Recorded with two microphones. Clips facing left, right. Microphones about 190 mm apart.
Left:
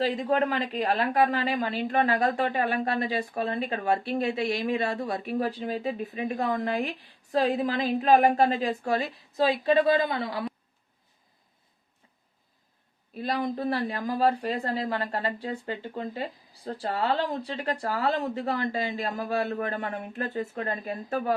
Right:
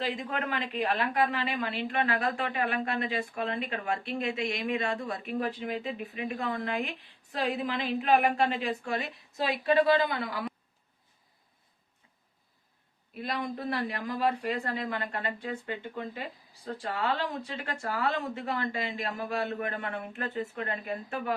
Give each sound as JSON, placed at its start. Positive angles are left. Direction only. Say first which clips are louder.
{"t": 0.0, "sound": "speech", "louder": "left 8 dB", "side_deg": 35}
{"t": 13.1, "sound": "speech", "louder": "left 5 dB", "side_deg": 35}